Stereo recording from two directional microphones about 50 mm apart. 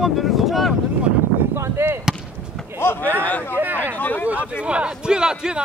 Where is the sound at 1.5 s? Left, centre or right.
Right.